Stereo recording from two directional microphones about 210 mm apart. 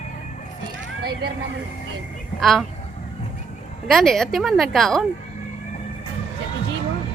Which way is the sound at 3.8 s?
Centre (ahead or behind).